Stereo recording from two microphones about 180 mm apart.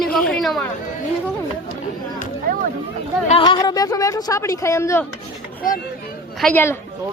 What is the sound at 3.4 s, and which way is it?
A woman's voice, 25° left (ahead or behind).